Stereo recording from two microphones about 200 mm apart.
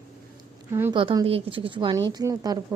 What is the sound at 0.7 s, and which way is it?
Speech, 10° right (ahead or behind).